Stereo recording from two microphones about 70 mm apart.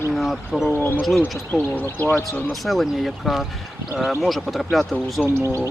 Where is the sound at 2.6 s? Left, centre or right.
Centre.